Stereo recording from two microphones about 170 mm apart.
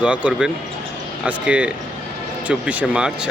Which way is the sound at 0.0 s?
5° right (ahead or behind).